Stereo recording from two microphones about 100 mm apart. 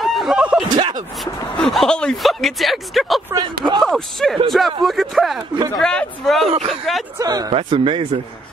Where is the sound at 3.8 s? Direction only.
5° left (ahead or behind).